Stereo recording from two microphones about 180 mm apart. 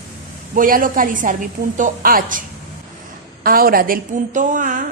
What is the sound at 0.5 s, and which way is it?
A woman's voice, 50° right (ahead or behind).